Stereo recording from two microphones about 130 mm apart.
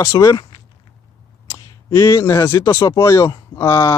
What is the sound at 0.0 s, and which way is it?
Speech, 25° left (ahead or behind).